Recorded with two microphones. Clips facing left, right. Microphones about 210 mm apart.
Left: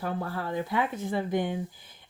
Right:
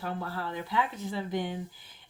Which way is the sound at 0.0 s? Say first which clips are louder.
Left 3 dB; 50° left (ahead or behind).